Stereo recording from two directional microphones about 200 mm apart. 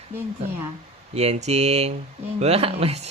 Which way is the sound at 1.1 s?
35° right (ahead or behind).